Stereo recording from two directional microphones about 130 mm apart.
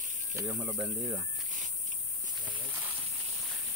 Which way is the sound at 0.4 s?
15° right (ahead or behind).